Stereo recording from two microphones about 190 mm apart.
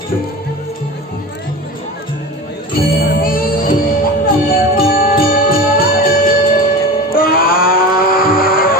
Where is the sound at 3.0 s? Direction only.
50° left (ahead or behind).